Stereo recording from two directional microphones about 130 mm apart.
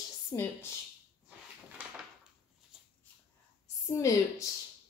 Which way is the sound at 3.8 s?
25° left (ahead or behind).